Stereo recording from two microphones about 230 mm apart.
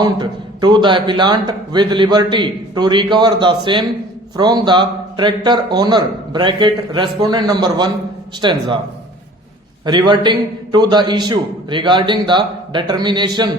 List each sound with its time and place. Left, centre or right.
0.0 s a man's voice: centre
9.8 s a man's voice: centre